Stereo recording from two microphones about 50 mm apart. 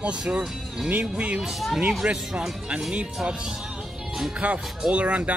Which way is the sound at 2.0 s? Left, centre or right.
Right.